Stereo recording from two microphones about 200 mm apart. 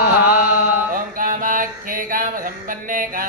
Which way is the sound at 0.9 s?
45° right (ahead or behind).